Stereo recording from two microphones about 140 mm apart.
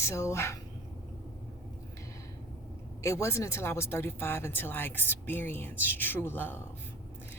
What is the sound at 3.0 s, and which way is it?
Speech, 20° left (ahead or behind).